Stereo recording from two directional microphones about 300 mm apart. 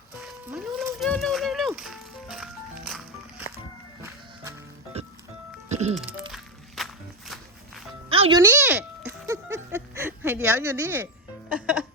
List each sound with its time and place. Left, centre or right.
0.2 s music: centre
4.9 s music: right
6.3 s walk: centre
8.1 s a sound: centre